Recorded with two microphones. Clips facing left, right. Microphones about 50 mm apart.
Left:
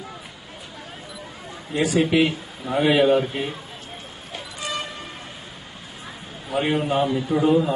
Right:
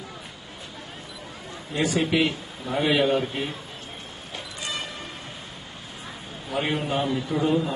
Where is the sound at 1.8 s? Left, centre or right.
Centre.